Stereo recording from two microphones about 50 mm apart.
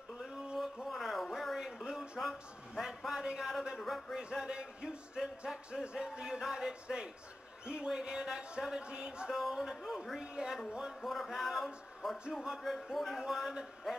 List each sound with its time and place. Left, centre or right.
0.8 s a sound: centre
2.1 s a man's voice: centre
4.2 s speech: centre
9.3 s speech: centre
10.2 s speech: centre
11.0 s speech: centre
12.3 s speech: centre
12.8 s speech: centre